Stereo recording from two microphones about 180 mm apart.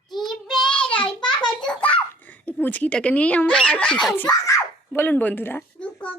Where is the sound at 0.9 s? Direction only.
25° left (ahead or behind).